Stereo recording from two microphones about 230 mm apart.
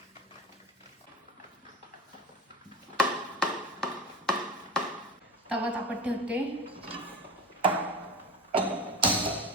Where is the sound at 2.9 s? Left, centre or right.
Centre.